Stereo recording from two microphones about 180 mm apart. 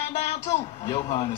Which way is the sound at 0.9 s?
35° left (ahead or behind).